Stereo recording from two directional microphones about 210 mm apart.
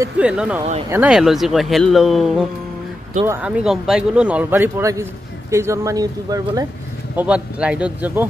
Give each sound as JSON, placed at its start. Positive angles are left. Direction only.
{"t": 0.0, "sound": "speech", "side_deg": -5}
{"t": 7.2, "sound": "speech", "side_deg": -5}